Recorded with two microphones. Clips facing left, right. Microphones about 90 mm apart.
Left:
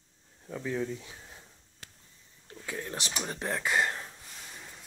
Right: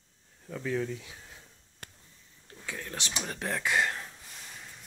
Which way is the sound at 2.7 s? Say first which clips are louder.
Left 3 dB; 25° left (ahead or behind).